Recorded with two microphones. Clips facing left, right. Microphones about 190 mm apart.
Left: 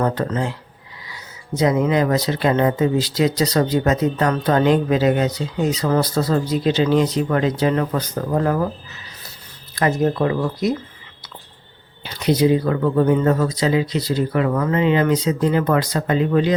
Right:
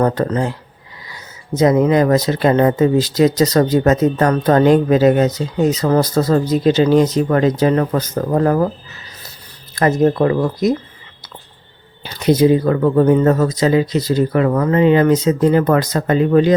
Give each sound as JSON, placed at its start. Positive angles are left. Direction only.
{"t": 0.0, "sound": "speech", "side_deg": -40}
{"t": 9.7, "sound": "speech", "side_deg": -45}
{"t": 12.0, "sound": "speech", "side_deg": -45}